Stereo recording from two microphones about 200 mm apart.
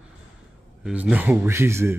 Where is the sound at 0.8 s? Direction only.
5° right (ahead or behind).